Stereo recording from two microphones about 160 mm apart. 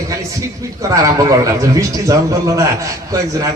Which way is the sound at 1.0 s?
20° right (ahead or behind).